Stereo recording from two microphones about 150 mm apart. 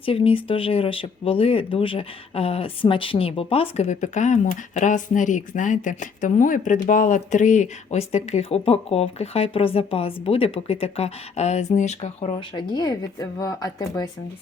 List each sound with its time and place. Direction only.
0.0 s speech: 35° left (ahead or behind)
12.5 s speech: 30° left (ahead or behind)